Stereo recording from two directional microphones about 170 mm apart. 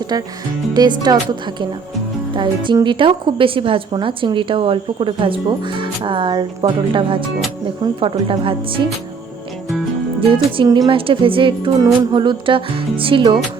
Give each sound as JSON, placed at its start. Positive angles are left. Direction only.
{"t": 0.1, "sound": "a woman's voice", "side_deg": -25}
{"t": 10.3, "sound": "a woman's voice", "side_deg": -25}